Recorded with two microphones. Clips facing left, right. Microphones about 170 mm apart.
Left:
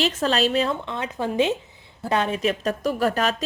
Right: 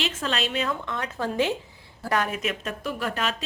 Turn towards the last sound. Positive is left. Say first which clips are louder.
# left 6 dB
turn(degrees=40)  # may be behind; listen again after turning